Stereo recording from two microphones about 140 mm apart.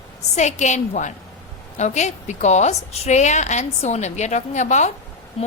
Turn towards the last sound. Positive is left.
turn(degrees=45)  # may be behind; listen again after turning